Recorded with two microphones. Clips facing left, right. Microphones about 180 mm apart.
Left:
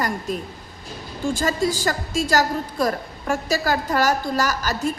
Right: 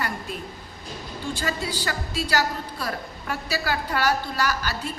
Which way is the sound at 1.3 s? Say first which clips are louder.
Left 7 dB; 45° left (ahead or behind).